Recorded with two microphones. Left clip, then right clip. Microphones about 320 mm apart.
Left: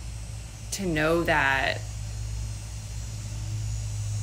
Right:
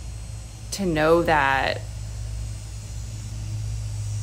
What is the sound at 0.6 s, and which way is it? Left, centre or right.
Speech, centre.